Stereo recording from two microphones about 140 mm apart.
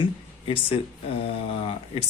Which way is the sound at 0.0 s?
40° left (ahead or behind).